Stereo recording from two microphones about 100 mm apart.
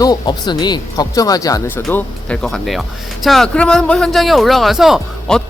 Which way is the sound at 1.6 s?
20° left (ahead or behind).